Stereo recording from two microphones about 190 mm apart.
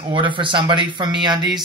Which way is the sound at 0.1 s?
25° right (ahead or behind).